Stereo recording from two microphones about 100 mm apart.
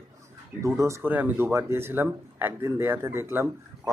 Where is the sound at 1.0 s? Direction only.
20° right (ahead or behind).